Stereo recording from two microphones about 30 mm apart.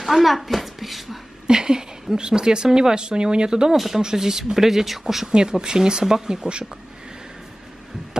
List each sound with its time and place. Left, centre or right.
0.0 s a child's voice: centre
1.5 s speech: right
3.7 s speech: centre
4.0 s speech: centre
5.2 s speech: right